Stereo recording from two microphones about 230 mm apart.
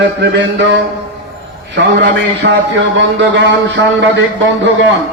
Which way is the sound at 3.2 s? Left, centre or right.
Right.